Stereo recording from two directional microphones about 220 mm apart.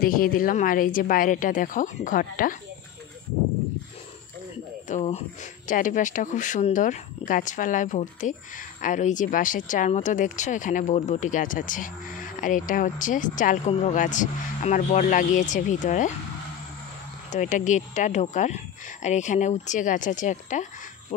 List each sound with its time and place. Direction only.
0.0 s speech: 40° left (ahead or behind)
4.8 s speech: 30° left (ahead or behind)
17.3 s speech: 35° left (ahead or behind)